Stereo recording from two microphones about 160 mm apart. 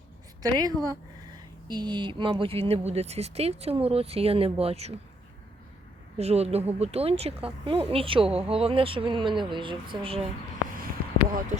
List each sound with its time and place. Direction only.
0.4 s a woman's voice: 25° right (ahead or behind); by 4.9 s 40° right (ahead or behind)
6.1 s speech: 40° right (ahead or behind)